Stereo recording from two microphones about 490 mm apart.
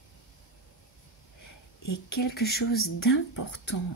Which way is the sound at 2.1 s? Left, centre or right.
Centre.